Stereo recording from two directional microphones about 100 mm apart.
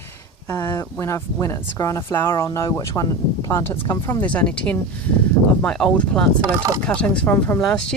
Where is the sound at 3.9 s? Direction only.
40° left (ahead or behind).